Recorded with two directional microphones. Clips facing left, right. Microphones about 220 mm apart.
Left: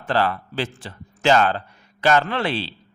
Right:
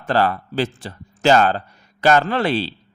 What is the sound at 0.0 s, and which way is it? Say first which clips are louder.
A man's voice: right 3 dB; 40° right (ahead or behind).